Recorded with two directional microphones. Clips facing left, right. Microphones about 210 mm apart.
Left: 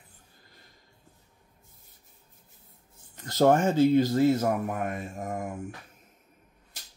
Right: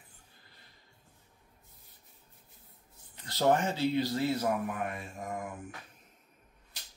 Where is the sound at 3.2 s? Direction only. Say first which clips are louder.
Left 6 dB; 45° left (ahead or behind).